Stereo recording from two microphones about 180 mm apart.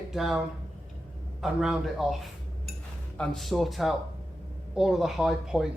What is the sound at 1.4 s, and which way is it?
Speech, centre (ahead or behind).